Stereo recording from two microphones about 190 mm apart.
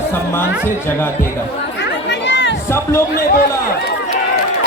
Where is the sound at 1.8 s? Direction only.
65° left (ahead or behind).